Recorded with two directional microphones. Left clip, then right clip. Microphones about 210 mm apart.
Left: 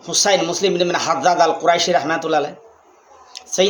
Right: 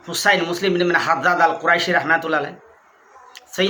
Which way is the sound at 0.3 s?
20° right (ahead or behind).